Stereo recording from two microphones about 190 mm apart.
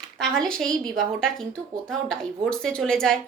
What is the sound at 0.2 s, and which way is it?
Speech, 5° left (ahead or behind).